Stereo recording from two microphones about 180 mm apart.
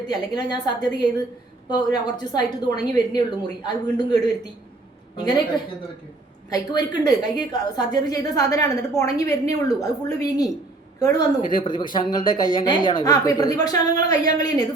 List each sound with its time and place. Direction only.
0.1 s a woman's voice: 25° left (ahead or behind)
6.5 s a woman's voice: 25° left (ahead or behind)